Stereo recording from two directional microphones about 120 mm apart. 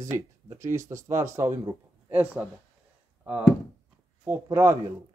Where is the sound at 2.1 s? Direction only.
15° right (ahead or behind).